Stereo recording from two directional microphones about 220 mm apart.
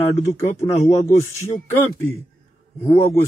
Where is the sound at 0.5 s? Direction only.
15° left (ahead or behind).